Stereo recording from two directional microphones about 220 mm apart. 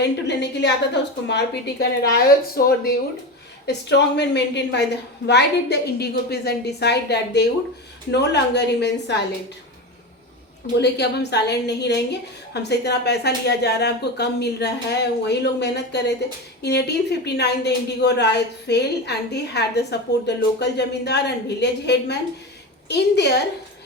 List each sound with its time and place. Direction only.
0.0 s a woman's voice: 50° left (ahead or behind)
10.8 s a woman's voice: 50° left (ahead or behind)